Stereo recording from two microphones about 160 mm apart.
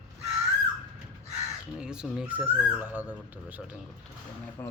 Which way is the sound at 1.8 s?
5° right (ahead or behind).